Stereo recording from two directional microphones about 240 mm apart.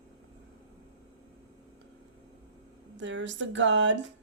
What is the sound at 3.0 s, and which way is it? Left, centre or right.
Speech, right.